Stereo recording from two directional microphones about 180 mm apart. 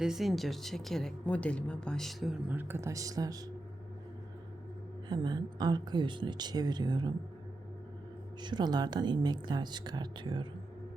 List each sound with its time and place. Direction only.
0.0 s speech: centre (ahead or behind); by 3.4 s 20° right (ahead or behind)
5.0 s speech: 25° right (ahead or behind)
8.4 s speech: 25° right (ahead or behind)